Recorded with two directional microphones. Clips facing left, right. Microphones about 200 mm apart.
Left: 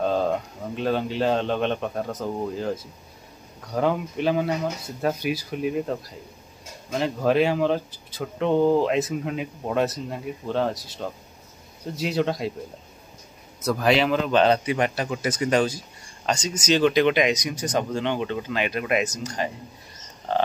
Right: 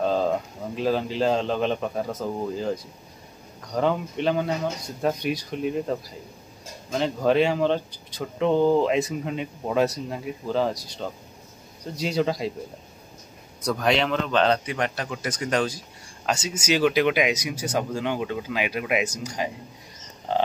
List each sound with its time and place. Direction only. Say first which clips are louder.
0.0 s speech: even; centre (ahead or behind)
13.7 s speech: left 2 dB; 5° left (ahead or behind); by 20.4 s 15° right (ahead or behind)